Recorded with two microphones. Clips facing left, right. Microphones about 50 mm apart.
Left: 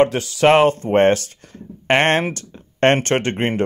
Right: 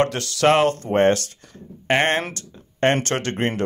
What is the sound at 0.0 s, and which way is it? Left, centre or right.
Speech, centre.